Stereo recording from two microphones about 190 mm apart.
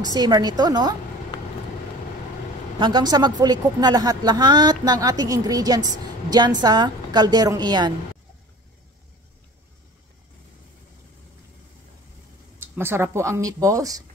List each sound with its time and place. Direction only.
0.0 s speech: 20° right (ahead or behind)
2.8 s speech: 20° right (ahead or behind)
12.5 s speech: 10° right (ahead or behind)